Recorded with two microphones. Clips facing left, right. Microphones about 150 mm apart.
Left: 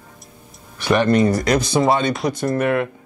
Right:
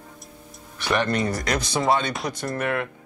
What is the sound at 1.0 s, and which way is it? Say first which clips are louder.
Speech: left 8 dB; 15° left (ahead or behind).